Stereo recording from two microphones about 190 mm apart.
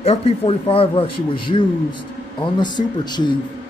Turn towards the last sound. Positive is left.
turn(degrees=25)  # may be behind; listen again after turning